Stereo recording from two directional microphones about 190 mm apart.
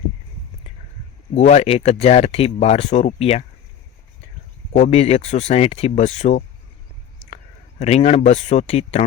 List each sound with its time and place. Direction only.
1.3 s speech: 35° left (ahead or behind)
4.7 s speech: 35° left (ahead or behind)
7.8 s speech: 35° left (ahead or behind)